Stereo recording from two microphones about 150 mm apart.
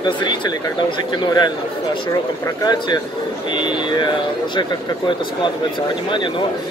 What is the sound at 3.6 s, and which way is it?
Speech, 30° left (ahead or behind).